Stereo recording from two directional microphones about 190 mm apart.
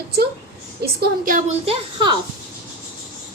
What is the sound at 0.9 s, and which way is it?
Speech, 45° right (ahead or behind).